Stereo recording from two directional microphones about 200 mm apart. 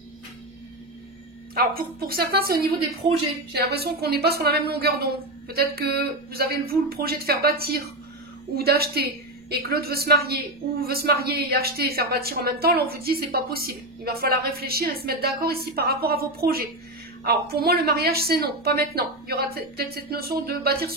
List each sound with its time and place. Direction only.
1.8 s a woman's voice: 50° right (ahead or behind)
3.0 s a woman's voice: 30° right (ahead or behind)
3.5 s a woman's voice: 55° right (ahead or behind)